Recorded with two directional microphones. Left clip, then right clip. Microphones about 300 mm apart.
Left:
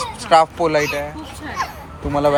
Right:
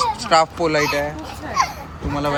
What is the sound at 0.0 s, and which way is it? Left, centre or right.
Speech, centre.